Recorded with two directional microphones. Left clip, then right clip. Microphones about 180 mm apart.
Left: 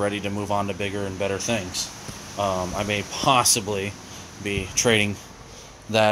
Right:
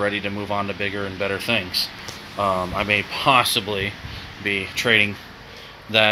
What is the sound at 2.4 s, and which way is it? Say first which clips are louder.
Speech: right 3 dB; 5° right (ahead or behind).